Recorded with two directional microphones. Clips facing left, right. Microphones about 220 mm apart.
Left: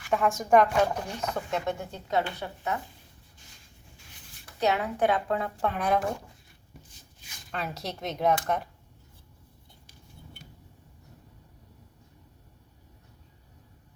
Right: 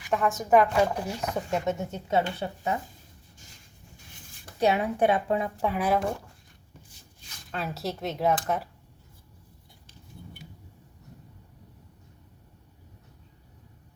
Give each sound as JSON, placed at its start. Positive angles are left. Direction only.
{"t": 0.1, "sound": "speech", "side_deg": 0}
{"t": 4.6, "sound": "speech", "side_deg": -25}
{"t": 5.6, "sound": "speech", "side_deg": -5}
{"t": 7.5, "sound": "speech", "side_deg": 0}